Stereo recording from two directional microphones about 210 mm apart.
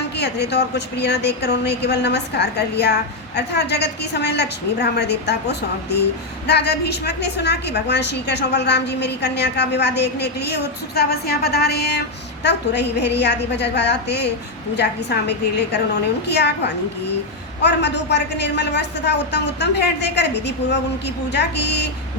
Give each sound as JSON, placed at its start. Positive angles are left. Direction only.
{"t": 0.2, "sound": "a woman's voice", "side_deg": 50}
{"t": 17.6, "sound": "a woman's voice", "side_deg": 55}